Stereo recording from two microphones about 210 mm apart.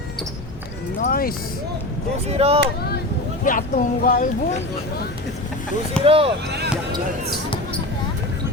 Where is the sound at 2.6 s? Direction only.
50° left (ahead or behind).